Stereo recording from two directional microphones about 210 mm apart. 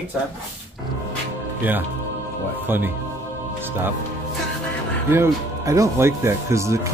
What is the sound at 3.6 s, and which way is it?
Music, 10° right (ahead or behind).